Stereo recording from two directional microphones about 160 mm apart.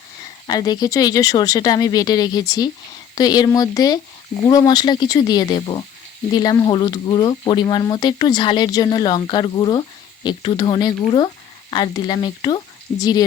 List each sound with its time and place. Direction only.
0.4 s speech: 25° left (ahead or behind)